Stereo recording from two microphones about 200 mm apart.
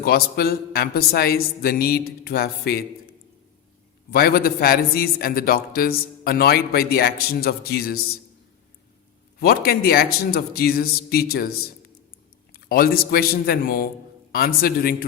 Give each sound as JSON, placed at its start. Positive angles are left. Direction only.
{"t": 0.0, "sound": "a man's voice", "side_deg": 50}
{"t": 4.1, "sound": "a man's voice", "side_deg": 50}
{"t": 9.4, "sound": "a man's voice", "side_deg": 50}
{"t": 12.5, "sound": "a man's voice", "side_deg": 50}